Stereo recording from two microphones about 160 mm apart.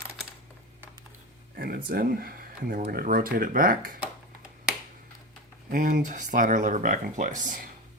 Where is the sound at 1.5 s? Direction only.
70° right (ahead or behind).